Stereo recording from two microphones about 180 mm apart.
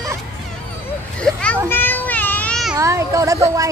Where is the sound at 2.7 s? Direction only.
15° right (ahead or behind).